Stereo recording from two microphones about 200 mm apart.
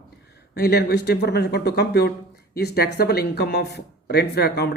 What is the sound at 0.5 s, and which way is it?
Speech, 50° left (ahead or behind).